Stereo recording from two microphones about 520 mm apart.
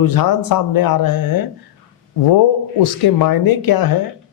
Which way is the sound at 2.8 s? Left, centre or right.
Left.